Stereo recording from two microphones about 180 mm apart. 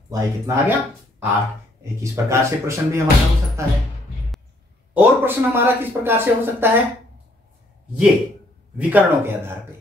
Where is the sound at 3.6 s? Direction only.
15° right (ahead or behind).